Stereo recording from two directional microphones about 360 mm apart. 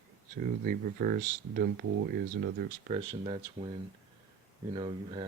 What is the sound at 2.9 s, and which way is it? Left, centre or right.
Speech, centre.